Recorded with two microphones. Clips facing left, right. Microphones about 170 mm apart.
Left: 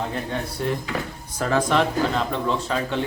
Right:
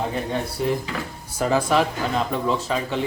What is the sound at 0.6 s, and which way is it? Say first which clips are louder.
Speech: right 1 dB; 5° right (ahead or behind).